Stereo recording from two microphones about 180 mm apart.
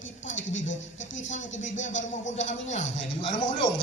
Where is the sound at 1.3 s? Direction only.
40° left (ahead or behind).